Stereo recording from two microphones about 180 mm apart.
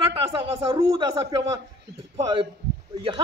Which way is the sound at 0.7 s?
15° right (ahead or behind).